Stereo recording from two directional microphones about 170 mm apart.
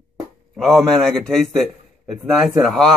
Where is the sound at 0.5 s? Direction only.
Centre (ahead or behind).